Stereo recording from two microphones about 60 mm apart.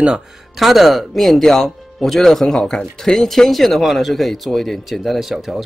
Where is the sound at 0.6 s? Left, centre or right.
Centre.